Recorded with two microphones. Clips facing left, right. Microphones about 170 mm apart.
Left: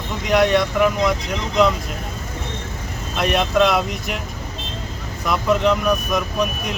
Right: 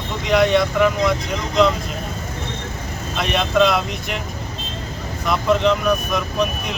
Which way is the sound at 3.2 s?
5° left (ahead or behind).